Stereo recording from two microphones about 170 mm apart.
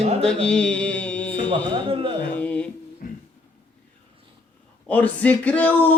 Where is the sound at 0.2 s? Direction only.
5° left (ahead or behind).